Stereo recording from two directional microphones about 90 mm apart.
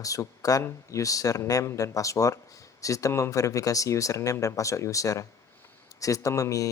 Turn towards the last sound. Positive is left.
turn(degrees=40)  # may be behind; listen again after turning